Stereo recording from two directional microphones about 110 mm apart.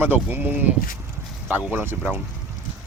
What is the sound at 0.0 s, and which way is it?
Speech, 15° right (ahead or behind).